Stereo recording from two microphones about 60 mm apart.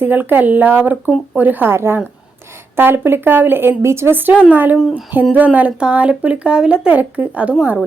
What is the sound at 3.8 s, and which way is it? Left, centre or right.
A woman's voice, right.